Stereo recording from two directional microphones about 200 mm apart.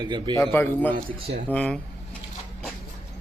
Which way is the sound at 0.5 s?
10° left (ahead or behind).